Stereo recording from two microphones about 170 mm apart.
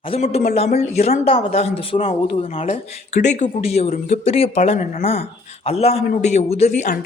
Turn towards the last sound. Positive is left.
turn(degrees=45)  # may be behind; listen again after turning